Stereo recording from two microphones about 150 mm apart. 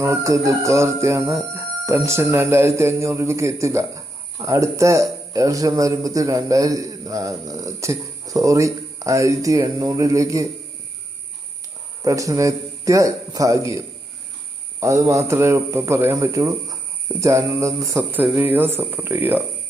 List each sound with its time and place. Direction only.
0.0 s speech: 20° right (ahead or behind)
12.0 s speech: 20° right (ahead or behind)